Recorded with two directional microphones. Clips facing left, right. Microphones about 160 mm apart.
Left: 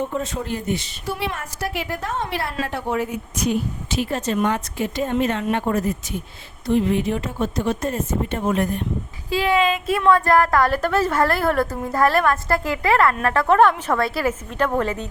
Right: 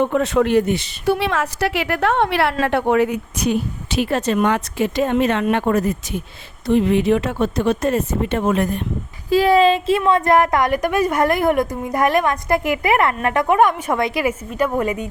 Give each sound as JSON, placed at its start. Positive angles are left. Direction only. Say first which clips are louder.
{"t": 0.0, "sound": "a woman's voice", "louder": "right 9 dB", "side_deg": -70}
{"t": 9.3, "sound": "a woman's voice", "louder": "right 6 dB", "side_deg": -40}